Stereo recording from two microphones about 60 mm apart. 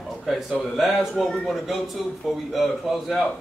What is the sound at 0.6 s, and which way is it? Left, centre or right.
Speech, centre.